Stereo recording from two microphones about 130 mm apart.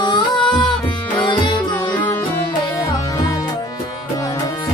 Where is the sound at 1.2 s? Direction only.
35° left (ahead or behind).